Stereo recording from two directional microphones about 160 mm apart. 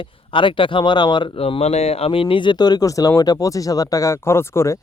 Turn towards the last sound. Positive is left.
turn(degrees=15)  # may be behind; listen again after turning